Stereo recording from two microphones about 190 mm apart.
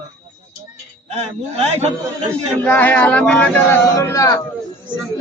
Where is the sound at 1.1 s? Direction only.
35° right (ahead or behind).